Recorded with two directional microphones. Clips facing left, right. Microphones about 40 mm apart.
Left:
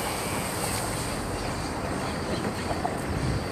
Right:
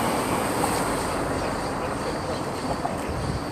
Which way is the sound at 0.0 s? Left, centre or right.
Centre.